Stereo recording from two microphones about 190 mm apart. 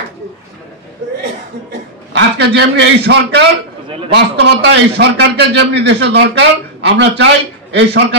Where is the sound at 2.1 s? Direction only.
65° right (ahead or behind).